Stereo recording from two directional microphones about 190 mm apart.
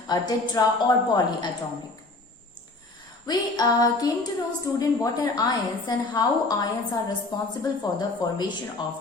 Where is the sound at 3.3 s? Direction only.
20° left (ahead or behind).